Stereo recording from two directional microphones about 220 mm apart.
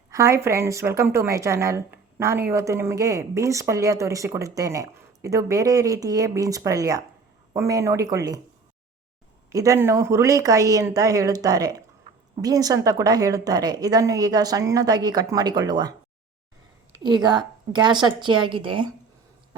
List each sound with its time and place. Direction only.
0.1 s speech: 15° right (ahead or behind)
9.5 s a woman's voice: 15° right (ahead or behind)